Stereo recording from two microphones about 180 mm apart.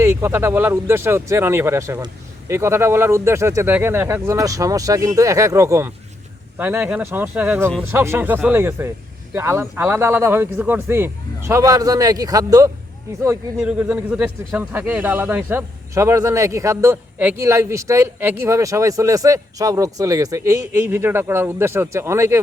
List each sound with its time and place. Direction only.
0.0 s speech: 15° right (ahead or behind)
13.6 s speech: 5° right (ahead or behind)